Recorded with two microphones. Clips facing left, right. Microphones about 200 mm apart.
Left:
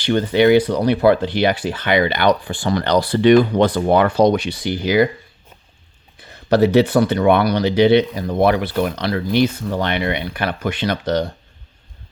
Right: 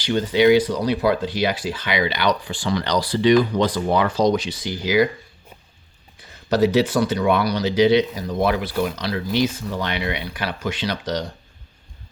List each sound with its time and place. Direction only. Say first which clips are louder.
0.0 s speech: left 2 dB; 55° left (ahead or behind)
6.5 s speech: left 4 dB; 60° left (ahead or behind)